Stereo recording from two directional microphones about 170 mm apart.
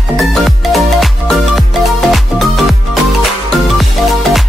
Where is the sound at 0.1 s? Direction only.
Centre (ahead or behind).